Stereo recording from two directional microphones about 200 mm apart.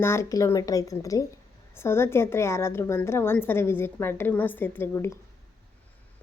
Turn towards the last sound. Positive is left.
turn(degrees=15)  # may be behind; listen again after turning